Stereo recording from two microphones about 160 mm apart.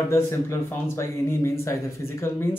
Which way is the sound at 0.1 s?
15° left (ahead or behind).